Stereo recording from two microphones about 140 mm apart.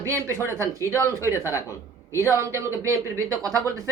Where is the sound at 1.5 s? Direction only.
20° left (ahead or behind).